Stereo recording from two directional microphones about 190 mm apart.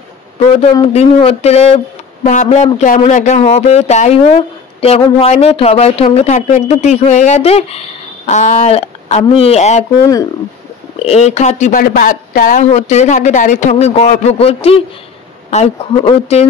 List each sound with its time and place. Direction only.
0.5 s speech: 30° left (ahead or behind)
11.0 s speech: 35° left (ahead or behind)